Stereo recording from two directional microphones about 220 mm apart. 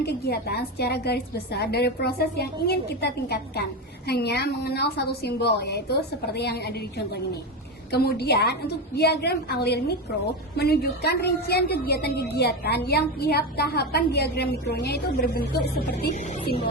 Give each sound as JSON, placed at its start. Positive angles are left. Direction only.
{"t": 0.0, "sound": "a woman's voice", "side_deg": 45}
{"t": 7.9, "sound": "a woman's voice", "side_deg": 45}